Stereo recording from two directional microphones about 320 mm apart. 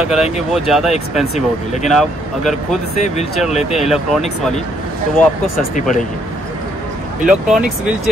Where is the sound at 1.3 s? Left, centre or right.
Left.